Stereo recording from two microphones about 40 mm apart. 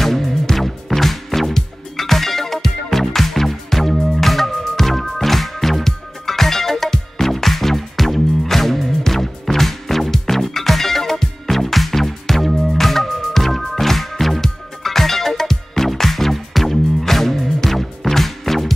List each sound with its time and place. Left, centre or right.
0.0 s music: centre